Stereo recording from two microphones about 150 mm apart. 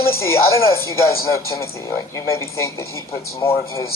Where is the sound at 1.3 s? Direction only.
20° left (ahead or behind).